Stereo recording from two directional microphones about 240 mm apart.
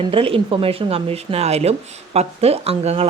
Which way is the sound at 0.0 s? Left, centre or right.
Right.